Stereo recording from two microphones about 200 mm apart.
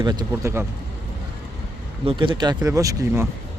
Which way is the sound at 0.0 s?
20° right (ahead or behind).